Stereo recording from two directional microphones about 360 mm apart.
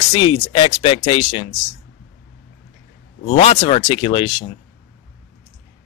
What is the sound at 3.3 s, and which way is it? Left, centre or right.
Speech, centre.